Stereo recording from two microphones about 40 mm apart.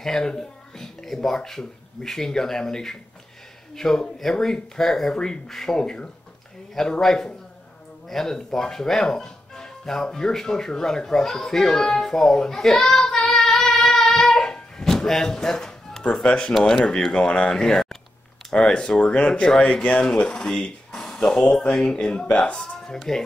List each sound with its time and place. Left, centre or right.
0.0 s speech: centre
5.1 s a child's voice: centre
20.2 s speech: centre
20.9 s a sound: centre
21.2 s speech: left